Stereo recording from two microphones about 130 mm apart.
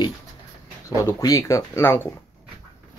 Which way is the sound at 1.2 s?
25° left (ahead or behind).